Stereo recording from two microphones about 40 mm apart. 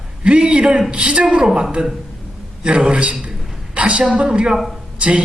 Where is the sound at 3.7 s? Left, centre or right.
Right.